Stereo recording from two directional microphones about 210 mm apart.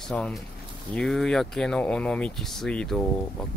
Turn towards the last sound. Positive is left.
turn(degrees=5)  # may be behind; listen again after turning